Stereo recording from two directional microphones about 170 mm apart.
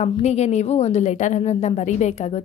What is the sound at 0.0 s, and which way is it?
A woman's voice, 40° left (ahead or behind).